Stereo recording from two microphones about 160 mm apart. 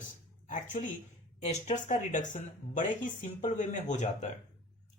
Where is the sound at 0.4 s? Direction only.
50° left (ahead or behind).